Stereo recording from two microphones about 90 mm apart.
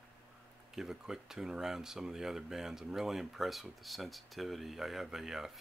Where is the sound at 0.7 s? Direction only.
5° right (ahead or behind).